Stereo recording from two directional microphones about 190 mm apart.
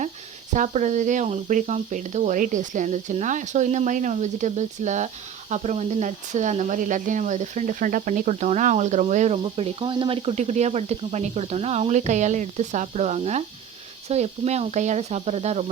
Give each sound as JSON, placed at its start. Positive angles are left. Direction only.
{"t": 0.5, "sound": "speech", "side_deg": -40}